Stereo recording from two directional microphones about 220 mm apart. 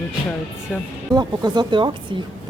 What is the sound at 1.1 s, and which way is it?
Speech, 20° right (ahead or behind).